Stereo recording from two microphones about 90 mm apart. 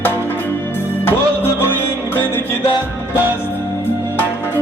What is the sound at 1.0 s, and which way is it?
Music, 25° left (ahead or behind).